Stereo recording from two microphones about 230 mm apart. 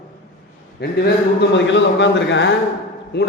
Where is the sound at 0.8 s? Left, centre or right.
Left.